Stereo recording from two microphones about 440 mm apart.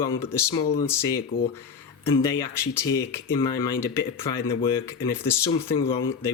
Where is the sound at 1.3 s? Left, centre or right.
Centre.